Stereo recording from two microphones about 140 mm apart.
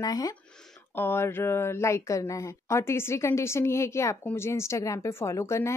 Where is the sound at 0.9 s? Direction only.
15° left (ahead or behind).